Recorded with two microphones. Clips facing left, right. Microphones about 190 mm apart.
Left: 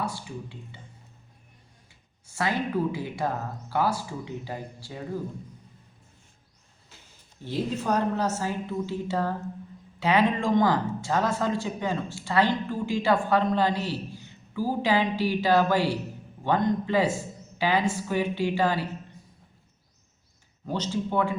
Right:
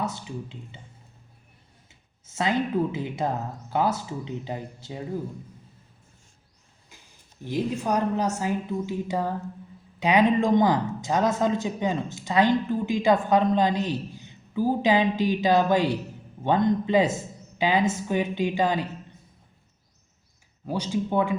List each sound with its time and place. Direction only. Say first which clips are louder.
0.0 s speech: right 2 dB; 20° right (ahead or behind)
1.9 s speech: right 1 dB; 20° right (ahead or behind)
6.9 s a sound: even; 15° right (ahead or behind)
7.4 s a woman's voice: right 1 dB; 15° right (ahead or behind)
20.7 s a woman's voice: right 2 dB; 10° right (ahead or behind)